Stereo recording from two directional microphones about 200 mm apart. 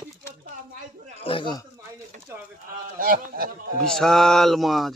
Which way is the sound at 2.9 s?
45° right (ahead or behind).